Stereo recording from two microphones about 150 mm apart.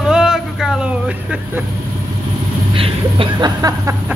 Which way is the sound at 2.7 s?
35° right (ahead or behind).